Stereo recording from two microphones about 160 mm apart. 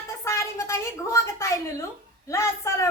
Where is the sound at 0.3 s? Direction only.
20° left (ahead or behind).